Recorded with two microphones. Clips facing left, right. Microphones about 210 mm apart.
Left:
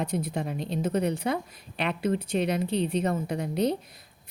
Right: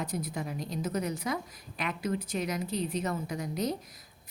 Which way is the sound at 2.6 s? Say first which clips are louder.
Left 6 dB; 65° left (ahead or behind).